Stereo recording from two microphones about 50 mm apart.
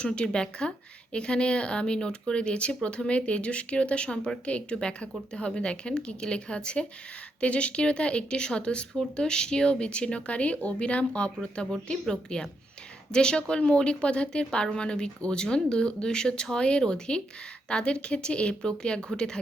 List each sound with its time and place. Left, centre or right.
0.0 s a woman's voice: centre